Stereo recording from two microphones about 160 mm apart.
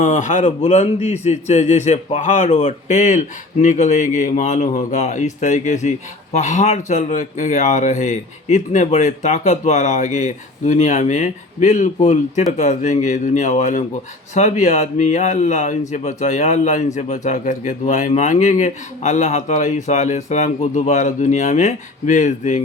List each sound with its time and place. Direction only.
0.0 s a man's voice: 50° left (ahead or behind)